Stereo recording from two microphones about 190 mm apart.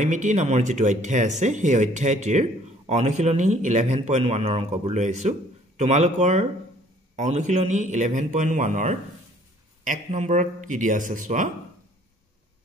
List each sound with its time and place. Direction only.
0.0 s speech: 40° right (ahead or behind)